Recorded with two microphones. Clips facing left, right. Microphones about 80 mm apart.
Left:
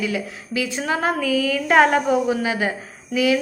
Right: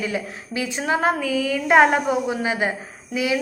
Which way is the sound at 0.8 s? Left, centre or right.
Centre.